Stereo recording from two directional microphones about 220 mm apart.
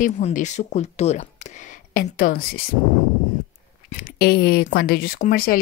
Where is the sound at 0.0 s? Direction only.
35° left (ahead or behind).